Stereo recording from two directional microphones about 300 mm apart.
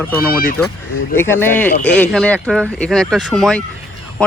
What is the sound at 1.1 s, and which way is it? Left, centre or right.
Speech, centre.